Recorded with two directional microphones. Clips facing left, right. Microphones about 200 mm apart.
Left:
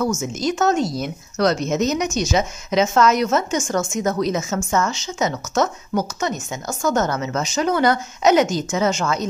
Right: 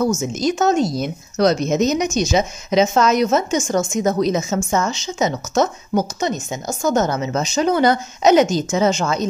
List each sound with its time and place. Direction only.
0.0 s speech: 20° right (ahead or behind)